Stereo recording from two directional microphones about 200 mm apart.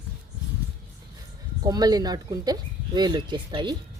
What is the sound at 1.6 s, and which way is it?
Speech, 20° right (ahead or behind).